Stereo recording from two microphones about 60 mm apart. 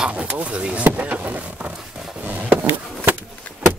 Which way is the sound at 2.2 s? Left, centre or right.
Right.